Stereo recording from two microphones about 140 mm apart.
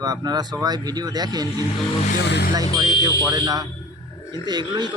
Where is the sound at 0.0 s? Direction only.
30° right (ahead or behind).